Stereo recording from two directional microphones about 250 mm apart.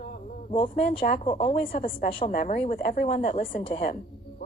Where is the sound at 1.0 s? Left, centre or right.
Left.